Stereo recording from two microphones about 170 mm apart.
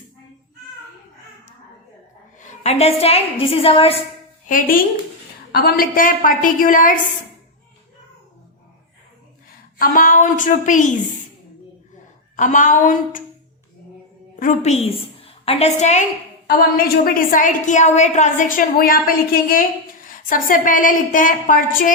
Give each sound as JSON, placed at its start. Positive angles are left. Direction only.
{"t": 2.4, "sound": "a woman's voice", "side_deg": 45}
{"t": 4.4, "sound": "a woman's voice", "side_deg": 55}
{"t": 5.5, "sound": "a woman's voice", "side_deg": 65}
{"t": 9.7, "sound": "a woman's voice", "side_deg": 55}
{"t": 12.4, "sound": "a woman's voice", "side_deg": 50}
{"t": 14.3, "sound": "a woman's voice", "side_deg": 45}
{"t": 16.5, "sound": "a woman's voice", "side_deg": 60}